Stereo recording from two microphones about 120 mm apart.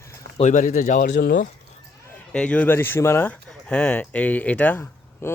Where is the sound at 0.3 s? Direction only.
80° left.